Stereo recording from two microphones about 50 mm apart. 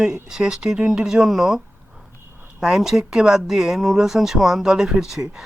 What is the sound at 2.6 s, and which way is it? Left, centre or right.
Speech, centre.